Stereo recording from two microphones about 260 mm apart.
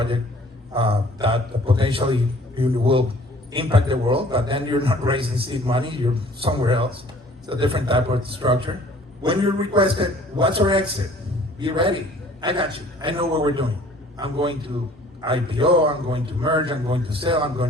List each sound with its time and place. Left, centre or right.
0.7 s a man's voice: right